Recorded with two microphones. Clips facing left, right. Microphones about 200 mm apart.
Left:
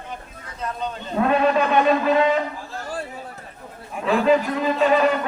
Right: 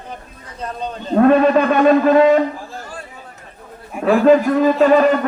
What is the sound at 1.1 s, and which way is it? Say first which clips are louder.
A man's voice: right 7 dB; 50° right (ahead or behind).